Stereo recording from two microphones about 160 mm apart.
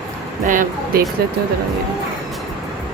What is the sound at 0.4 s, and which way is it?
Speech, 55° right (ahead or behind).